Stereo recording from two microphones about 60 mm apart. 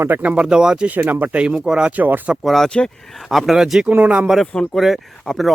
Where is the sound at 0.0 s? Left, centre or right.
Right.